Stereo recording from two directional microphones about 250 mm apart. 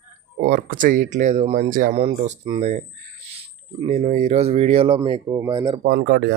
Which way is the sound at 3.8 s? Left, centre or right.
Right.